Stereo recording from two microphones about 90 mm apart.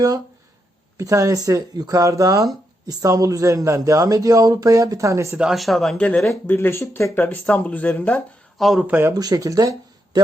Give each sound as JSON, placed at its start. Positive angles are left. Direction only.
{"t": 0.9, "sound": "a man's voice", "side_deg": -40}
{"t": 5.4, "sound": "speech", "side_deg": -5}
{"t": 6.5, "sound": "speech", "side_deg": 25}
{"t": 8.5, "sound": "speech", "side_deg": 0}
{"t": 8.8, "sound": "speech", "side_deg": -20}
{"t": 9.1, "sound": "speech", "side_deg": -45}